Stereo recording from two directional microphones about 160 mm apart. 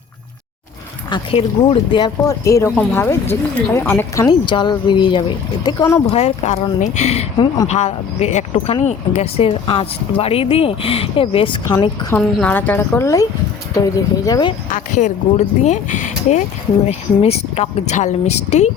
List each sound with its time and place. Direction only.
1.1 s a woman's voice: 35° left (ahead or behind)
6.1 s a woman's voice: 40° left (ahead or behind)
12.1 s a woman's voice: 10° left (ahead or behind)
14.3 s speech: 25° left (ahead or behind)
14.7 s a woman's voice: 50° left (ahead or behind)